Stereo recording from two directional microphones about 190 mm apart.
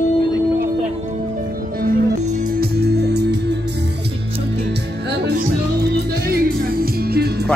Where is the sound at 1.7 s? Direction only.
50° right (ahead or behind).